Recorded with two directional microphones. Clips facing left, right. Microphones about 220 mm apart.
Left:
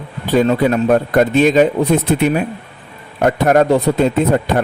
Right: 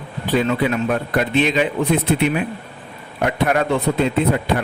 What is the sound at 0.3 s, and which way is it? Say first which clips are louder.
A man's voice: left 5 dB; 45° left (ahead or behind).